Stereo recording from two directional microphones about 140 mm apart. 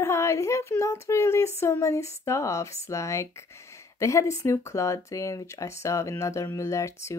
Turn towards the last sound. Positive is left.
turn(degrees=20)  # may be behind; listen again after turning